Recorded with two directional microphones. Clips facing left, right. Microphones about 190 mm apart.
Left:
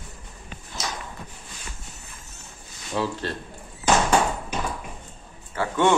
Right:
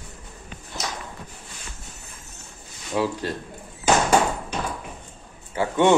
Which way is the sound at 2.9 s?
10° right (ahead or behind).